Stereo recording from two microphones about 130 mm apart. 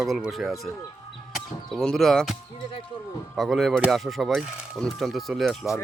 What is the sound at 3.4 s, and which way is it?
Speech, centre (ahead or behind).